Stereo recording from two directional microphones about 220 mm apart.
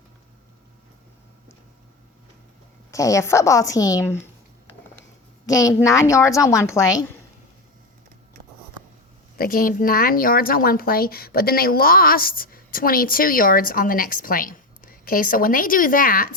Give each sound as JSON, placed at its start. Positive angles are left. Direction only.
{"t": 2.9, "sound": "a woman's voice", "side_deg": 15}
{"t": 5.5, "sound": "a woman's voice", "side_deg": 15}
{"t": 9.4, "sound": "speech", "side_deg": 40}